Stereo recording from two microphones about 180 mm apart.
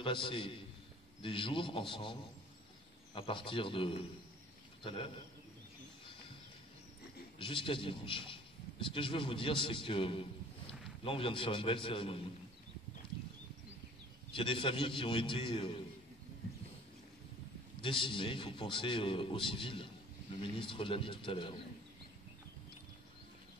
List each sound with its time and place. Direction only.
0.0 s a man's voice: 30° left (ahead or behind)
3.2 s a man's voice: 30° left (ahead or behind)
7.3 s a man's voice: 30° left (ahead or behind)
14.3 s a man's voice: 30° left (ahead or behind)
17.8 s a man's voice: 30° left (ahead or behind)